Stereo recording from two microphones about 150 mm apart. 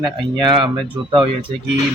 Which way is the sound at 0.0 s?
30° right (ahead or behind).